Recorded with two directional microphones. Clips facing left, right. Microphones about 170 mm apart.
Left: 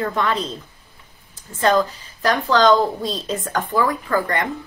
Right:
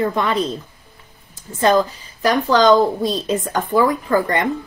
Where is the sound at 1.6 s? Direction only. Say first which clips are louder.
Right 2 dB; 15° right (ahead or behind).